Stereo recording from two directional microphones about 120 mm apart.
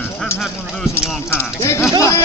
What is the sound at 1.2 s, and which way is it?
Speech, 25° left (ahead or behind).